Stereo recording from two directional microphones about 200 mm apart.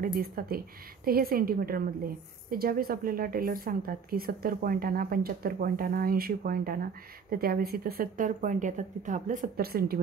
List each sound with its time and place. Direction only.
0.0 s a woman's voice: 45° right (ahead or behind)